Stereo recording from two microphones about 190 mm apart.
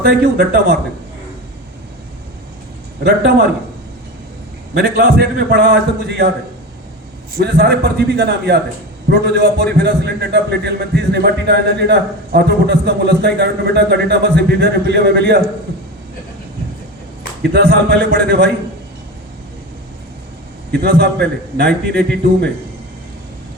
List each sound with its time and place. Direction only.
0.0 s a man's voice: 55° right (ahead or behind)
3.0 s a man's voice: 60° right (ahead or behind)
4.7 s a man's voice: 60° right (ahead or behind)
7.3 s a man's voice: 55° right (ahead or behind)
17.4 s a man's voice: 55° right (ahead or behind)
20.7 s a man's voice: 60° right (ahead or behind)